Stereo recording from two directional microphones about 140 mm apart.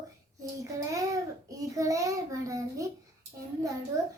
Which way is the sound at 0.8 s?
25° right (ahead or behind).